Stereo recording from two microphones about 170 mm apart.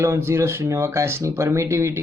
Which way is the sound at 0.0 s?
15° right (ahead or behind).